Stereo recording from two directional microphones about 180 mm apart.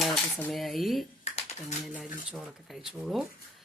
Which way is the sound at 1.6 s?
Centre (ahead or behind).